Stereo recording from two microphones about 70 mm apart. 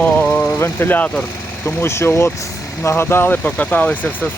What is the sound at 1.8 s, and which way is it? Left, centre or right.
Speech, left.